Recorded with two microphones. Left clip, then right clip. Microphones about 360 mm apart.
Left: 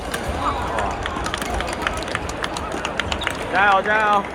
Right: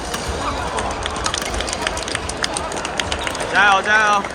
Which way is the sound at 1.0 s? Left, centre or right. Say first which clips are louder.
Right 2 dB; centre.